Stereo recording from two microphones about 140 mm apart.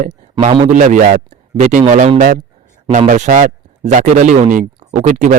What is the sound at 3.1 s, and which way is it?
Speech, 65° right (ahead or behind).